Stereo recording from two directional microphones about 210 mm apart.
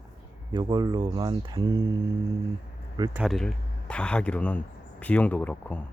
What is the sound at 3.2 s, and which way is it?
Speech, centre (ahead or behind).